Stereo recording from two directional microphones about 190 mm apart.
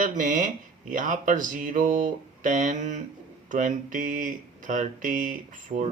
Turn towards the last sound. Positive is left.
turn(degrees=-40)  # may be behind; listen again after turning